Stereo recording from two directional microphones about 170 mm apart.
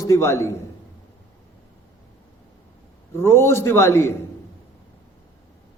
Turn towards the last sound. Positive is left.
turn(degrees=15)  # may be behind; listen again after turning